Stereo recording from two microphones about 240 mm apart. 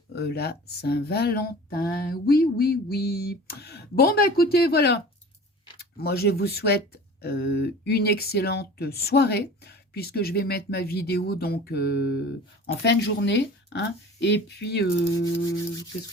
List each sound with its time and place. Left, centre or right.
0.1 s speech: left
6.0 s speech: left
15.2 s toothbrush: centre